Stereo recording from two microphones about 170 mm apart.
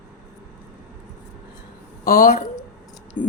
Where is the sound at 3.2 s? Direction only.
50° left (ahead or behind).